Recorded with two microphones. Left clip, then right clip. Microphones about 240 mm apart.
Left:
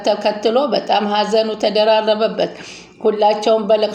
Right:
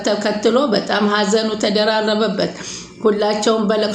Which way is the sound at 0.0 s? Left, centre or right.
Centre.